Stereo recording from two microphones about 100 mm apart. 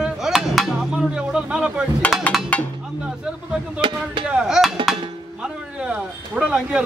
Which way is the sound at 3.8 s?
55° right (ahead or behind).